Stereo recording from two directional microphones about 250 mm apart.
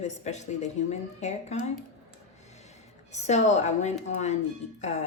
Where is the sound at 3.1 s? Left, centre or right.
Left.